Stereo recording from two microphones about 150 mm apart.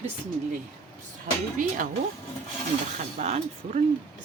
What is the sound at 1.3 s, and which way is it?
Speech, 60° right (ahead or behind).